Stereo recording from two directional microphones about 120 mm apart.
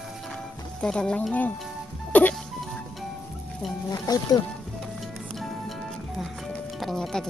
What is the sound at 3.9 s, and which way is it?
Speech, 30° left (ahead or behind).